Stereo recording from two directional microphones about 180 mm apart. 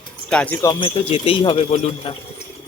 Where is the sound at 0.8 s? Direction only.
30° left (ahead or behind).